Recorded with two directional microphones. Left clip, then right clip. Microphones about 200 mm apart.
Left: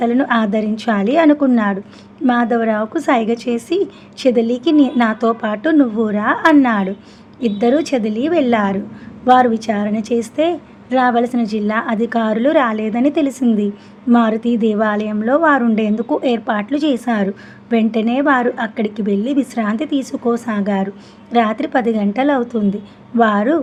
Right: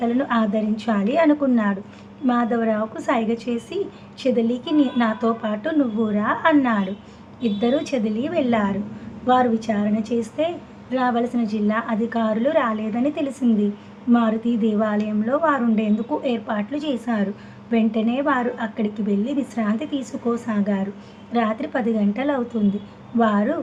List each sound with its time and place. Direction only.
0.0 s a woman's voice: 45° left (ahead or behind)